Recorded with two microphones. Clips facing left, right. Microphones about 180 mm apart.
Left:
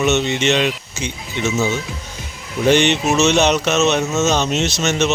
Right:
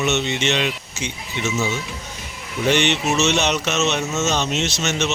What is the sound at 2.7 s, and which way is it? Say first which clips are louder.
Speech: left 4 dB; 40° left (ahead or behind).